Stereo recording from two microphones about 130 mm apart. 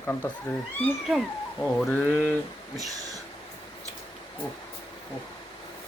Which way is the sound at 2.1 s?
15° left (ahead or behind).